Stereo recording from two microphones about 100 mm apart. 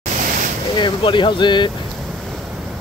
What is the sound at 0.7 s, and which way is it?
Speech, 55° left (ahead or behind).